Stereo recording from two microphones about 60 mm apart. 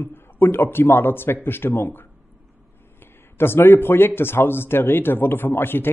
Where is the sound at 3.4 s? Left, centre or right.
Left.